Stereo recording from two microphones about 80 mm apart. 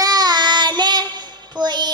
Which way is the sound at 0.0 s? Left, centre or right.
Right.